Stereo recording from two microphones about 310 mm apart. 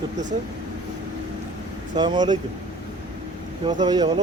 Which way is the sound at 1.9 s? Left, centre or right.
Centre.